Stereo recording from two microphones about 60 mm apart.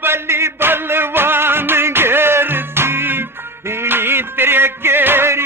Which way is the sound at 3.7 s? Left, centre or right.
Right.